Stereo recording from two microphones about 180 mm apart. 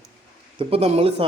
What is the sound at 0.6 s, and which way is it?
Speech, 35° right (ahead or behind).